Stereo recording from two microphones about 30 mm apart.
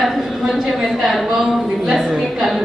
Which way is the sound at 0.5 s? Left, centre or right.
Centre.